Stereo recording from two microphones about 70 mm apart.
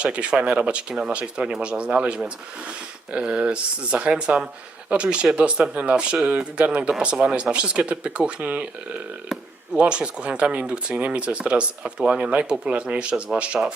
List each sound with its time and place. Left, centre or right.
0.0 s speech: centre
9.7 s speech: centre